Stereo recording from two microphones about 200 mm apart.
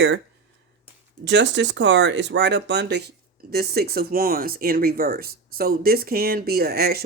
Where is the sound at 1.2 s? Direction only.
60° right (ahead or behind).